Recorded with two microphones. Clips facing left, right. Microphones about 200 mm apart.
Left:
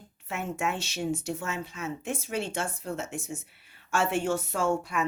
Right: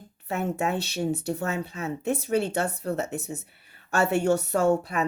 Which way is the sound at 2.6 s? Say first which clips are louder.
Right 6 dB; 65° right (ahead or behind).